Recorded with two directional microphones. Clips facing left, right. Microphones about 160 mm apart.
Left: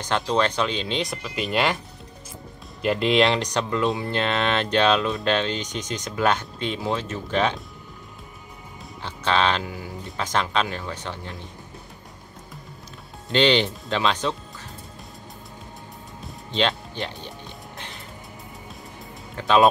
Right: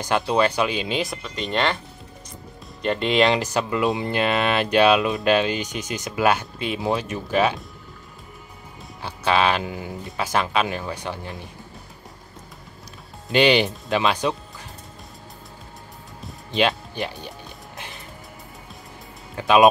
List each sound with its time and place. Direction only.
0.0 s speech: 10° right (ahead or behind); by 1.8 s 10° left (ahead or behind)
2.8 s speech: 5° left (ahead or behind)
3.9 s speech: 20° right (ahead or behind)
4.2 s speech: 10° right (ahead or behind)
9.0 s speech: 10° right (ahead or behind)
13.3 s speech: 10° right (ahead or behind)
16.5 s speech: 10° right (ahead or behind)
19.3 s speech: 10° right (ahead or behind)